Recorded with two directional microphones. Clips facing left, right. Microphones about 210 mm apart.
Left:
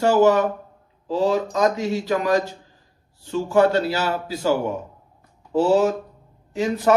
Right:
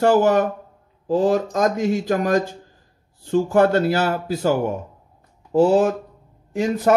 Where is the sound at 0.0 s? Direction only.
55° right (ahead or behind).